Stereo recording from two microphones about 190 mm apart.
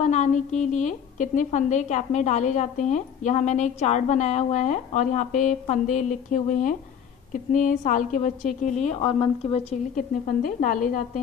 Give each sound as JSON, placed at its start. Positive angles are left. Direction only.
{"t": 0.0, "sound": "a woman's voice", "side_deg": 40}